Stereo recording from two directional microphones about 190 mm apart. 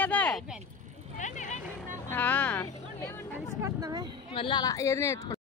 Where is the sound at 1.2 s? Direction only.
40° left (ahead or behind).